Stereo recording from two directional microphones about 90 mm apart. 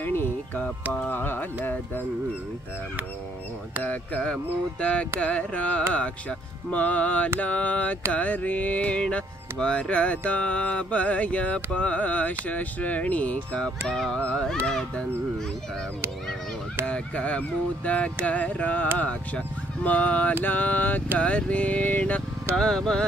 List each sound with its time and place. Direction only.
0.0 s music: 25° left (ahead or behind)
1.0 s carnatic music: 20° left (ahead or behind)
3.8 s music: 20° left (ahead or behind)
16.8 s music: 15° left (ahead or behind)
20.4 s carnatic music: 20° left (ahead or behind)
21.2 s music: 15° left (ahead or behind)
22.6 s music: 5° left (ahead or behind)